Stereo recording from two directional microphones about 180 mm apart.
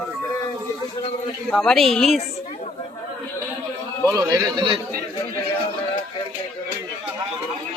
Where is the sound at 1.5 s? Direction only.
5° left (ahead or behind).